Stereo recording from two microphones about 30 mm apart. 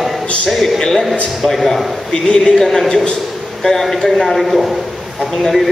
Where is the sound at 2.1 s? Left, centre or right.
Centre.